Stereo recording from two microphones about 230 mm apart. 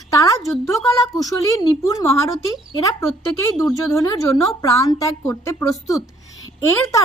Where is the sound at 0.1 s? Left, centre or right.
Centre.